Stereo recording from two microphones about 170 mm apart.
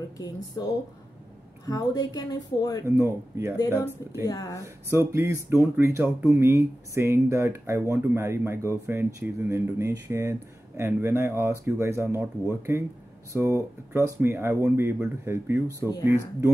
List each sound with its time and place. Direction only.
0.6 s speech: 20° left (ahead or behind)
2.8 s speech: 15° right (ahead or behind)
3.5 s speech: 20° left (ahead or behind)
4.8 s speech: 15° right (ahead or behind)